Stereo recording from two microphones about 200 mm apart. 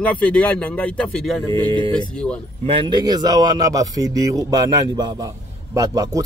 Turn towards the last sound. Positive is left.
turn(degrees=-20)  # may be behind; listen again after turning